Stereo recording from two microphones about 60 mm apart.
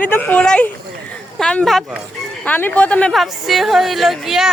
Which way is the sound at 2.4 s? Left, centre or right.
Left.